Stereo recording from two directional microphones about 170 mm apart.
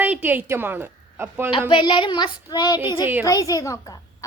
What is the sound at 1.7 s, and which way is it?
A woman's voice, 30° left (ahead or behind).